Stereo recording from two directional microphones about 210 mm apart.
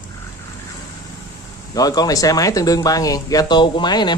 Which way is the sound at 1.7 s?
15° left (ahead or behind).